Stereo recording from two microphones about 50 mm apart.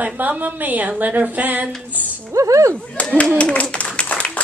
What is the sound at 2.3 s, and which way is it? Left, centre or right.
Speech, right.